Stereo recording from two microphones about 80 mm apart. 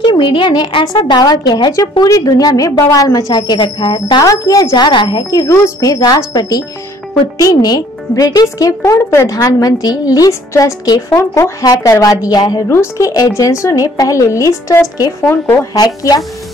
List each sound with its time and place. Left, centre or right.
0.0 s a woman's voice: left
2.0 s a woman's voice: left
3.3 s a woman's voice: left
4.2 s a woman's voice: left
9.4 s a woman's voice: left
12.6 s a woman's voice: left
15.2 s speech: left
15.7 s a woman's voice: left